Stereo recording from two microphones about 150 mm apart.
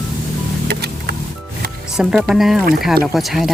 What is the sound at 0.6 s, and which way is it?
Music, 90° right.